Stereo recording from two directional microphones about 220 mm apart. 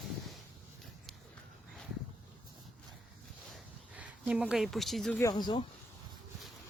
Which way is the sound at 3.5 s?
5° right (ahead or behind).